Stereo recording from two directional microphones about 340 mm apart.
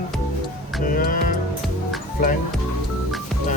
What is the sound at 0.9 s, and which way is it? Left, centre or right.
Music, left.